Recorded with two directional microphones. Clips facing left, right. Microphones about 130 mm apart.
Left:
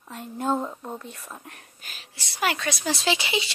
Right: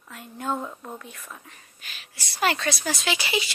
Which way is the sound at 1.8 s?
40° left (ahead or behind).